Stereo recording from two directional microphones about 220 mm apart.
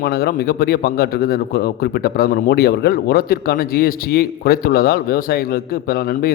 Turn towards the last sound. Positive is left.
turn(degrees=45)  # may be behind; listen again after turning